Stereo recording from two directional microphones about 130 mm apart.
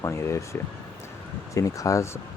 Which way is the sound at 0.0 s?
20° left (ahead or behind).